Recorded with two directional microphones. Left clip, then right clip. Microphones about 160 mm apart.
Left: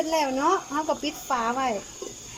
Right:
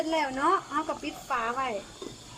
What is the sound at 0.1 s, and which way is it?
Speech, 15° left (ahead or behind).